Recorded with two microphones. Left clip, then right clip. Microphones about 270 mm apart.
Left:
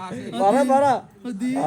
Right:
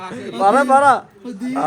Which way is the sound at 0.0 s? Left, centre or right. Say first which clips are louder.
Right 4 dB; left.